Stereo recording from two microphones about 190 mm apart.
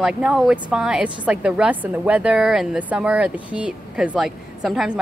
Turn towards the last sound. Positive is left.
turn(degrees=-5)  # may be behind; listen again after turning